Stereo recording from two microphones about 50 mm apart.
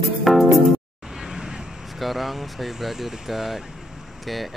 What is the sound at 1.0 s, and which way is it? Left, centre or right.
Vehicle, centre.